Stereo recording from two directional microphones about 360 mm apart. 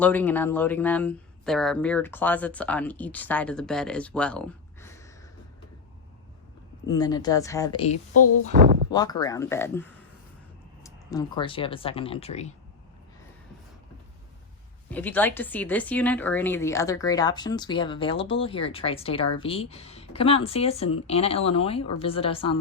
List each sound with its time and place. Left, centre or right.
0.0 s a woman's voice: centre
6.8 s speech: centre
8.5 s speech: right
8.9 s speech: centre
14.8 s speech: centre